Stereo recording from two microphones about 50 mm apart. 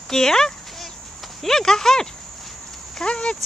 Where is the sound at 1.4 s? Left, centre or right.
Centre.